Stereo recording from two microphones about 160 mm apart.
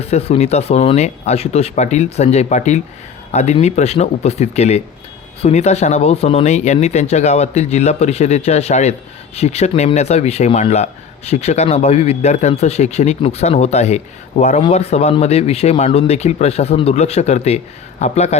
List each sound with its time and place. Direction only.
0.0 s speech: 40° left (ahead or behind)